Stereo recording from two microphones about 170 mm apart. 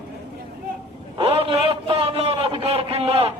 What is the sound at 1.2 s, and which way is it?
A man's voice, 35° right (ahead or behind).